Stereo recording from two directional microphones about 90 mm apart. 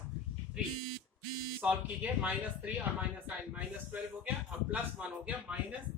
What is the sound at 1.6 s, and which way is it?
Speech, 15° right (ahead or behind).